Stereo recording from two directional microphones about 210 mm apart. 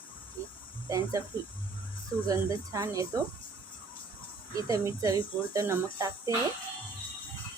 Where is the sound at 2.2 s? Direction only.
15° right (ahead or behind).